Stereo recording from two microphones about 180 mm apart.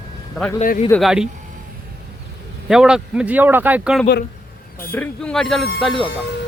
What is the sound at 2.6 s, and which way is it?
Speech, 5° right (ahead or behind).